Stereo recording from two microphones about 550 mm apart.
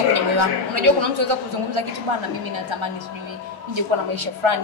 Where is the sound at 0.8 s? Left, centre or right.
Right.